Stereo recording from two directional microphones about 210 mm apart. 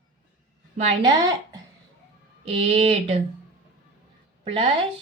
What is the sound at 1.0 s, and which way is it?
A woman's voice, 20° right (ahead or behind).